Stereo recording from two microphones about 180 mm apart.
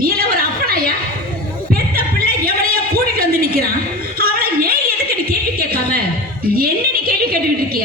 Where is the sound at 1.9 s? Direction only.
55° right (ahead or behind).